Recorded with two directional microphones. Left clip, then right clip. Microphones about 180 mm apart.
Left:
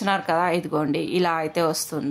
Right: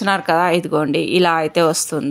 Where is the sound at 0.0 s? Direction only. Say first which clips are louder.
Right 6 dB; 25° right (ahead or behind).